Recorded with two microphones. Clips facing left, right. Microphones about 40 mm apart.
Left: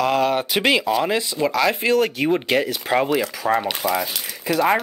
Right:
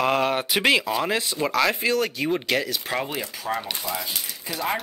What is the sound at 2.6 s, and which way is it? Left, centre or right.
Speech, left.